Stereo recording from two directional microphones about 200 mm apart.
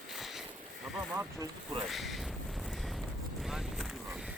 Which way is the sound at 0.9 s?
10° right (ahead or behind).